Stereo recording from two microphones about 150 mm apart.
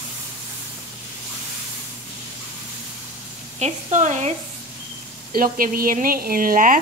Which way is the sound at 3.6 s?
55° right (ahead or behind).